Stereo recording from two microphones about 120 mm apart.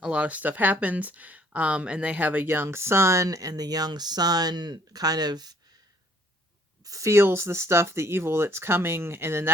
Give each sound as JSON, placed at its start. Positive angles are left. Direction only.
{"t": 0.0, "sound": "speech", "side_deg": -10}
{"t": 6.8, "sound": "speech", "side_deg": -25}